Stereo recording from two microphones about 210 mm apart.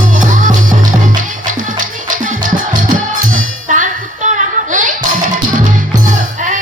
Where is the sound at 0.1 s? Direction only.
40° right (ahead or behind).